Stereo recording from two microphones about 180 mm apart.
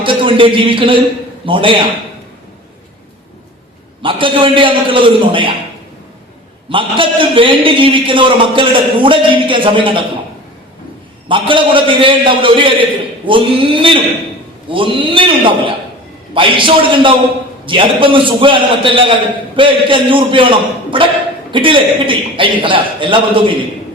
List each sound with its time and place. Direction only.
0.0 s a man's voice: 30° right (ahead or behind)
4.0 s a man's voice: 30° right (ahead or behind)
6.7 s a man's voice: 30° right (ahead or behind)
11.3 s a man's voice: 25° right (ahead or behind)